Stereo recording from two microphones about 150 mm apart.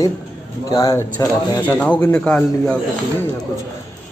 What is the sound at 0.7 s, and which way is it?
Speech, 25° left (ahead or behind).